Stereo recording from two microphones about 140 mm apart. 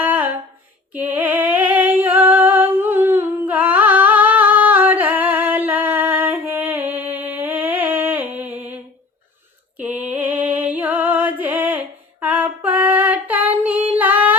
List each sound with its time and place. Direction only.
0.0 s a sound: 10° right (ahead or behind)
9.7 s female singing: 10° right (ahead or behind)
11.2 s music: 10° right (ahead or behind)
12.2 s female singing: 10° right (ahead or behind)